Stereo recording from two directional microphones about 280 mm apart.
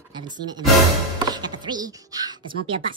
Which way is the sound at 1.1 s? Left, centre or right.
Centre.